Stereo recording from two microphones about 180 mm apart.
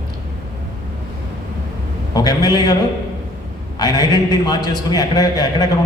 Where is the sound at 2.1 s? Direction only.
20° left (ahead or behind).